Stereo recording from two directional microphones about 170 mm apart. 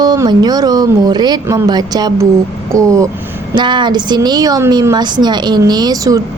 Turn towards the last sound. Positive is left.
turn(degrees=-20)  # may be behind; listen again after turning